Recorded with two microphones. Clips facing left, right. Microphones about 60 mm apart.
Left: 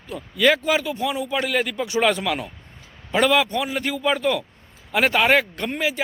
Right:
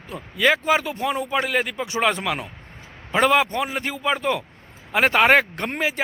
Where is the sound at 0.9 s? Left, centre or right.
Right.